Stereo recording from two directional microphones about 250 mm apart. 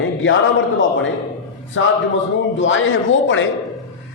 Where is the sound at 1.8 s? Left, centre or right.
Left.